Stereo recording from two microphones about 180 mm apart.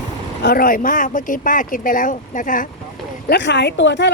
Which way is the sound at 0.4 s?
55° left (ahead or behind).